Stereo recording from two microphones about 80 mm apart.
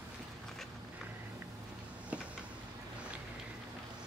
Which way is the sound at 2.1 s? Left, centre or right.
Right.